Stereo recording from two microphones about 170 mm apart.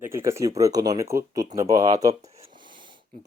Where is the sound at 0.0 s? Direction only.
15° right (ahead or behind).